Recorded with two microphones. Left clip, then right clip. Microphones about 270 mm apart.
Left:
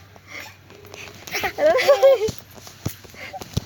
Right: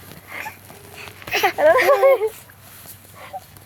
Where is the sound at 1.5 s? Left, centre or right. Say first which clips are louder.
Right 2 dB; left.